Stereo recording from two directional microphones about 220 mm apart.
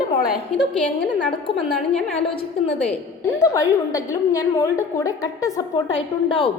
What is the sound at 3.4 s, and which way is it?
A woman's voice, 15° left (ahead or behind).